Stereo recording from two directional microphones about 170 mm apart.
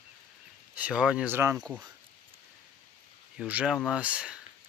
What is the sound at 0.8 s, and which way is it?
Speech, 5° right (ahead or behind).